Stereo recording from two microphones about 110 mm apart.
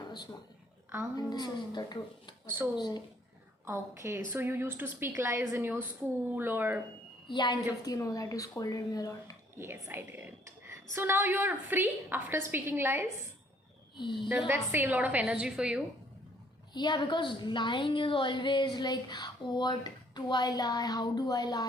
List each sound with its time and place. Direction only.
1.1 s a woman's voice: 40° left (ahead or behind)
3.7 s a woman's voice: 25° right (ahead or behind)
7.3 s a woman's voice: 45° left (ahead or behind)
7.9 s a woman's voice: 35° left (ahead or behind)
9.6 s a woman's voice: 20° right (ahead or behind)
14.0 s a woman's voice: 45° left (ahead or behind)
14.3 s a woman's voice: 10° right (ahead or behind)
16.7 s a woman's voice: 40° left (ahead or behind)